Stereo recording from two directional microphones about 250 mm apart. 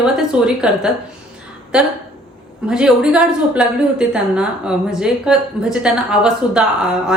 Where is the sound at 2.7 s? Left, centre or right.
Centre.